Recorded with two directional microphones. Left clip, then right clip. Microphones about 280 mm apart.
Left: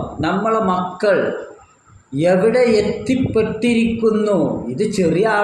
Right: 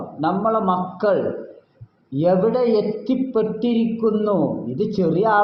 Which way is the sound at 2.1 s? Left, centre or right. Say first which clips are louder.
Left 4 dB; centre.